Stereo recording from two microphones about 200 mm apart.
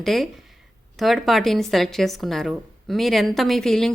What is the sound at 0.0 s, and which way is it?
A woman's voice, centre (ahead or behind).